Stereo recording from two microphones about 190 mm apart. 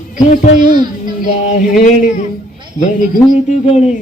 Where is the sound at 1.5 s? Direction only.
45° left (ahead or behind).